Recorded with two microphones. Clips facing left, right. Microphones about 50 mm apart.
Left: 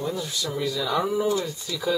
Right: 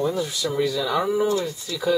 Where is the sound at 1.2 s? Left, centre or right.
Centre.